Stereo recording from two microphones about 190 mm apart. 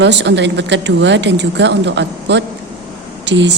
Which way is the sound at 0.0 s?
70° right (ahead or behind).